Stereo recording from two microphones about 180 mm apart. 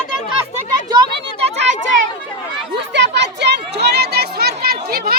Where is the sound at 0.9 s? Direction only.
35° right (ahead or behind).